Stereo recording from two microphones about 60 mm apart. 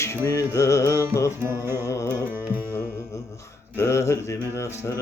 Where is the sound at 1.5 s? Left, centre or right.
Right.